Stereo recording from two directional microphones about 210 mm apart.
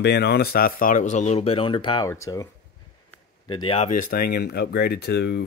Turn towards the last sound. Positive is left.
turn(degrees=55)  # may be behind; listen again after turning